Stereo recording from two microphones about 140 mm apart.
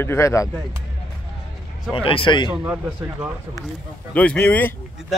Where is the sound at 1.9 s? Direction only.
40° left (ahead or behind).